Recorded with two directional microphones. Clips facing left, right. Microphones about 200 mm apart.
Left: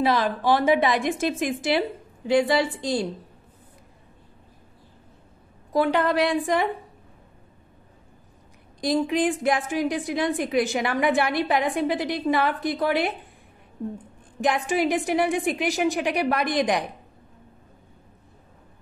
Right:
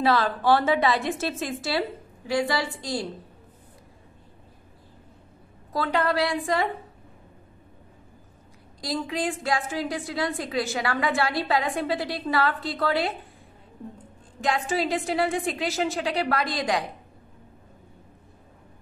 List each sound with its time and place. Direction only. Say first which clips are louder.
0.0 s a woman's voice: even; 15° left (ahead or behind)
5.7 s a woman's voice: left 4 dB; 20° left (ahead or behind)
8.8 s a woman's voice: left 6 dB; 20° left (ahead or behind)
14.4 s a woman's voice: left 3 dB; 15° left (ahead or behind)